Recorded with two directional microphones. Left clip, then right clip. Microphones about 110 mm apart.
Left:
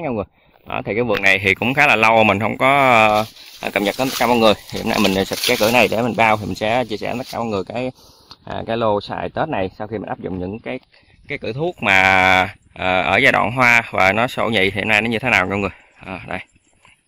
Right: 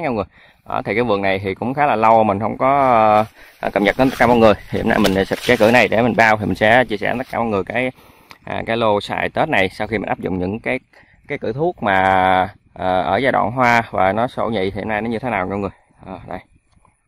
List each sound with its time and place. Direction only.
0.7 s speech: 35° right (ahead or behind)
1.2 s speech: 15° right (ahead or behind)
3.2 s speech: 25° right (ahead or behind)
5.0 s speech: 15° right (ahead or behind)
5.6 s speech: 25° right (ahead or behind)
6.2 s speech: 45° right (ahead or behind)
7.0 s speech: 25° right (ahead or behind); by 9.7 s 50° right (ahead or behind)
9.8 s speech: 65° right (ahead or behind)
11.8 s speech: 35° right (ahead or behind)
12.1 s speech: 25° right (ahead or behind)